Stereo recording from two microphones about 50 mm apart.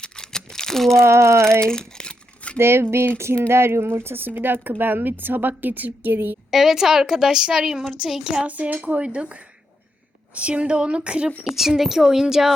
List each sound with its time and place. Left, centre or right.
0.0 s crumpling: centre
1.0 s a sound: right
1.6 s crumpling: centre
2.6 s a woman's voice: right
6.5 s a woman's voice: centre
8.4 s speech: right
11.5 s a woman's voice: centre